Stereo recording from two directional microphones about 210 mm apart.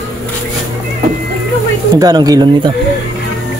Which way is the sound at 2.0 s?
20° right (ahead or behind).